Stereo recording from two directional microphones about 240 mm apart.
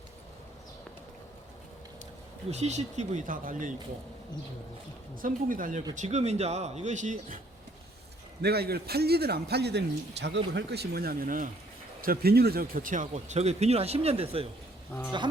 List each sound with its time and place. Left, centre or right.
2.5 s speech: right
5.2 s a man's voice: right
8.4 s a man's voice: right